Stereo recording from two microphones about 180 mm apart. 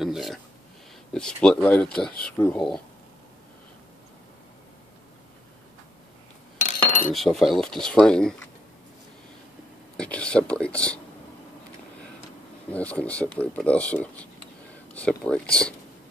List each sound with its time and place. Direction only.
0.0 s a sound: centre (ahead or behind)
1.1 s speech: 5° left (ahead or behind)
6.6 s cutlery: 45° left (ahead or behind)
7.2 s speech: centre (ahead or behind)
9.9 s speech: 5° left (ahead or behind)
12.7 s speech: 5° left (ahead or behind)